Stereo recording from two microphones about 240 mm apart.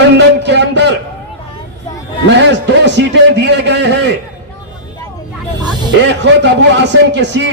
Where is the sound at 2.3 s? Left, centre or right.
Right.